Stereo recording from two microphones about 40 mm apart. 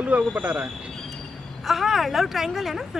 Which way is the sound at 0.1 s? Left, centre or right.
Right.